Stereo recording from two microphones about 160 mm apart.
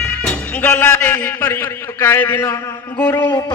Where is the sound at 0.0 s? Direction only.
10° left (ahead or behind).